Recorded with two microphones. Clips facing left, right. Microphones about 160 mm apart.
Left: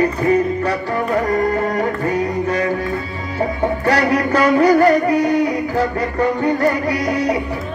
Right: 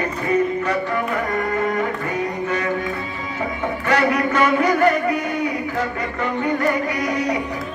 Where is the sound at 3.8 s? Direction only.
35° left (ahead or behind).